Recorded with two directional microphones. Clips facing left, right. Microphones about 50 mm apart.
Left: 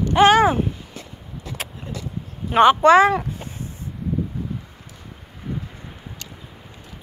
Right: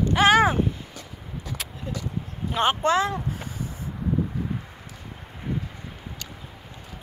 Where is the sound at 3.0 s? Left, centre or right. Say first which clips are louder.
Left 9 dB; left.